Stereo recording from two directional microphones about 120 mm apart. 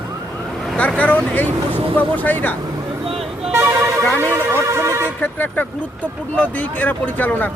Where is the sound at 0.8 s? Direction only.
10° left (ahead or behind).